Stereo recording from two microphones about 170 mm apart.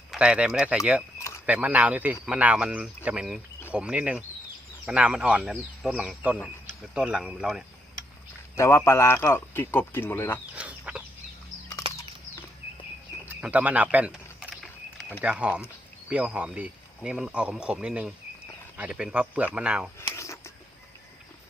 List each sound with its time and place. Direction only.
0.1 s speech: 5° right (ahead or behind)
8.5 s speech: 15° left (ahead or behind)
10.5 s chicken: 10° right (ahead or behind)
13.2 s a sound: 10° right (ahead or behind)
15.2 s speech: 5° right (ahead or behind)
20.1 s a sound: 15° left (ahead or behind)